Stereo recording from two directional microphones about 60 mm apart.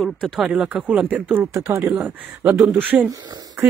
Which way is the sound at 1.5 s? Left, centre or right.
Right.